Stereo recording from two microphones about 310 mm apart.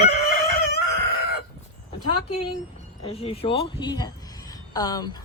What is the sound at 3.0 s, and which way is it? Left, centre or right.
A woman's voice, centre.